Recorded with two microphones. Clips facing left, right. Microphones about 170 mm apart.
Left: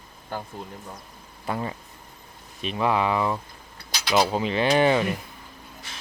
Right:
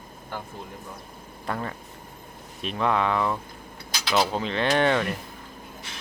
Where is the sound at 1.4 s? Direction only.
10° left (ahead or behind).